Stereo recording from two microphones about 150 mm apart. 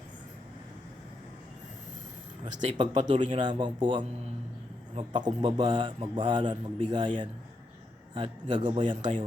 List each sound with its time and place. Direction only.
2.4 s a man's voice: 35° right (ahead or behind)